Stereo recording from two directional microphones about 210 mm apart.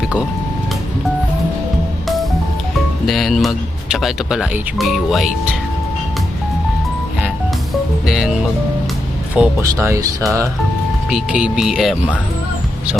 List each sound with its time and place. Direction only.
3.1 s speech: centre (ahead or behind)
8.0 s speech: centre (ahead or behind)
11.1 s speech: 5° right (ahead or behind)